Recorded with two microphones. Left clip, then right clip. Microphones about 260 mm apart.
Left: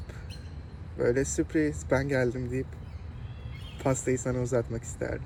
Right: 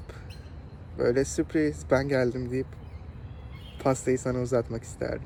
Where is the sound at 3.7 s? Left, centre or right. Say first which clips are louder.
Right 3 dB; centre.